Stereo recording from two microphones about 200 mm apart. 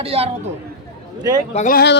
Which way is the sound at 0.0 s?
30° right (ahead or behind).